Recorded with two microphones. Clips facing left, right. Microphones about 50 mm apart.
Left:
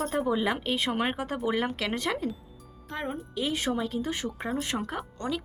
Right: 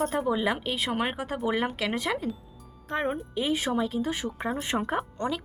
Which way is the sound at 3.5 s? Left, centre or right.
Centre.